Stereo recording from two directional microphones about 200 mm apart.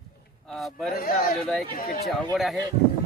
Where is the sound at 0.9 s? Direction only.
45° left (ahead or behind).